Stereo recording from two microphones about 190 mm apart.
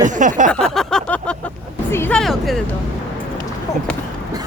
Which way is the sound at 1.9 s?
10° left (ahead or behind).